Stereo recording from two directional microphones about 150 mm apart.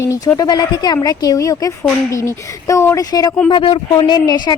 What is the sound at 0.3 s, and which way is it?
A woman's voice, 25° left (ahead or behind).